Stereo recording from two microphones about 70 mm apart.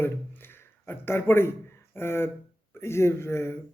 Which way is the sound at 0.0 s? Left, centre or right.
Left.